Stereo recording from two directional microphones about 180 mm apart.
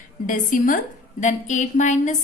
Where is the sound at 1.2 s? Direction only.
40° left (ahead or behind).